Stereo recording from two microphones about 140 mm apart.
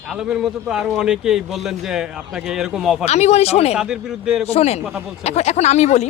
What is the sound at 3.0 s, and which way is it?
Speech, 50° left (ahead or behind).